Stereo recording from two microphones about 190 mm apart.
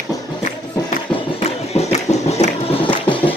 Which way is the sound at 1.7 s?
35° left (ahead or behind).